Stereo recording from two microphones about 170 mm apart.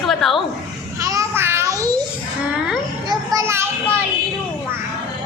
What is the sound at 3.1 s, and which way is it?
Children playing, 15° right (ahead or behind).